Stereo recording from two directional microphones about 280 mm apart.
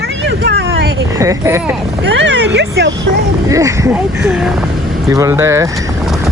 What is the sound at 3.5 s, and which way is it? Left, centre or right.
Speech, centre.